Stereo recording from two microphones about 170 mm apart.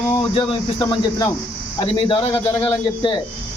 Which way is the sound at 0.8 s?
20° left (ahead or behind).